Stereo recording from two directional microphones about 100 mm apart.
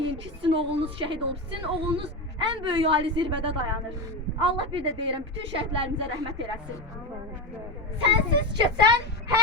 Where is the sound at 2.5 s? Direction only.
60° right (ahead or behind).